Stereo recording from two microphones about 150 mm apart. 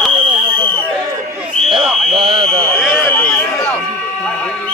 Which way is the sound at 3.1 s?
15° left (ahead or behind).